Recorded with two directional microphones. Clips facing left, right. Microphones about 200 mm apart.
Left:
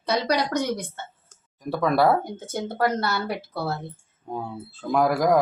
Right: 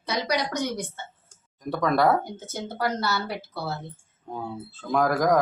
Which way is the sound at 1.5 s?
5° left (ahead or behind).